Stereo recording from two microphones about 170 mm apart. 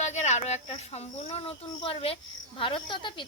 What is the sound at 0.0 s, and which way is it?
A woman's voice, 45° left (ahead or behind).